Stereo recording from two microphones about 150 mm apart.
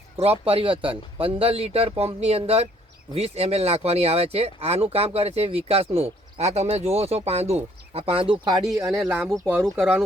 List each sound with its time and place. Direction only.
0.2 s speech: 40° right (ahead or behind); by 9.6 s 15° right (ahead or behind)